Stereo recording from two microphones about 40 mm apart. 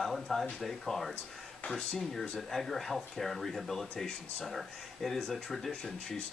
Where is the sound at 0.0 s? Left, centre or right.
Centre.